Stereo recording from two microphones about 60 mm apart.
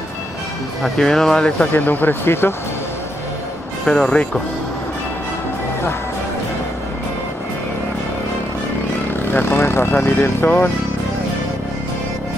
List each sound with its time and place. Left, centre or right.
0.8 s speech: centre
1.7 s speech: left
3.8 s speech: centre
9.3 s speech: left